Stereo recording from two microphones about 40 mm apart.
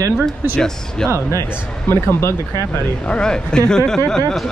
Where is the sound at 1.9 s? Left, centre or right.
Left.